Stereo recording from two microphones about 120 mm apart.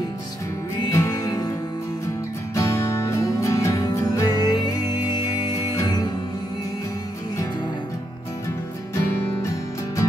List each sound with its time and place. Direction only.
0.9 s music: 25° left (ahead or behind)
2.5 s music: 25° left (ahead or behind)
9.4 s music: 25° left (ahead or behind)